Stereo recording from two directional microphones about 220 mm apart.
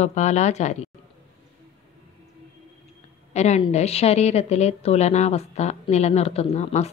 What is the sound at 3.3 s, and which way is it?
A woman's voice, 30° left (ahead or behind).